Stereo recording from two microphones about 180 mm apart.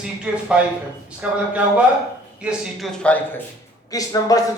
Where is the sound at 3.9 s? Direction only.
20° left (ahead or behind).